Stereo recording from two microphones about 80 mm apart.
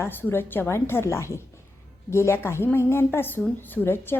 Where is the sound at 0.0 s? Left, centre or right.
Left.